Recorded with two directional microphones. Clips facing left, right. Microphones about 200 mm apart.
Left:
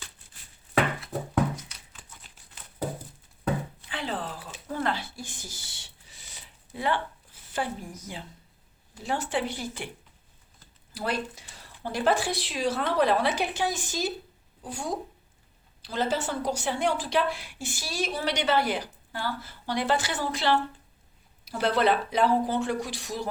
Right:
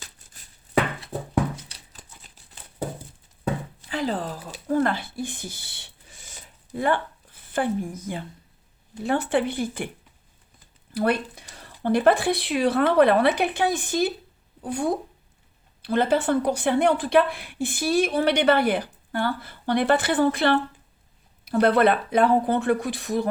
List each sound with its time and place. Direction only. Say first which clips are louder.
1.6 s a sound: right 2 dB; 35° right (ahead or behind)
3.8 s a woman's voice: right 6 dB; 40° right (ahead or behind)
10.9 s a woman's voice: right 7 dB; 60° right (ahead or behind)